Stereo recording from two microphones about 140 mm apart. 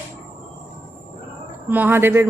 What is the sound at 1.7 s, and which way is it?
Speech, 15° right (ahead or behind).